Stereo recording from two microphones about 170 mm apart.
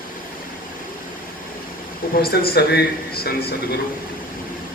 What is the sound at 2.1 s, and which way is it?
Speech, 65° left (ahead or behind).